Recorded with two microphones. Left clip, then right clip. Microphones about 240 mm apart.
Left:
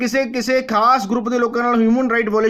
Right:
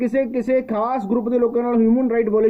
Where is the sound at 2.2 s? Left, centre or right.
Left.